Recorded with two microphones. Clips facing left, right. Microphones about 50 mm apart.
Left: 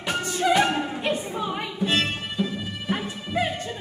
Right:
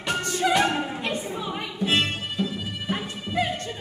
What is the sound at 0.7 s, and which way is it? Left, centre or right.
Music, centre.